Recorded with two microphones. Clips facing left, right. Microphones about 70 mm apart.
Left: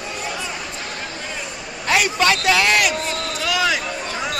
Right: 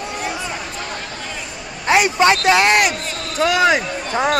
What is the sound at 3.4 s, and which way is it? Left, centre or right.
Speech, right.